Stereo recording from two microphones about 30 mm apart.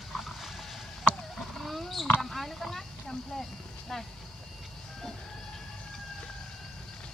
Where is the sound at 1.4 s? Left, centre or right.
Centre.